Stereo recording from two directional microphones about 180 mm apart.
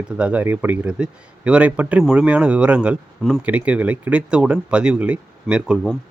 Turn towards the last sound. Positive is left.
turn(degrees=0)  # may be behind; listen again after turning